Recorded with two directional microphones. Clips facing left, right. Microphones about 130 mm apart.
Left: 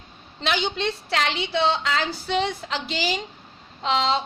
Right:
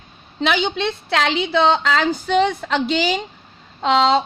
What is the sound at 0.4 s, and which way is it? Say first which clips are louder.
Speech: right 5 dB; 60° right (ahead or behind).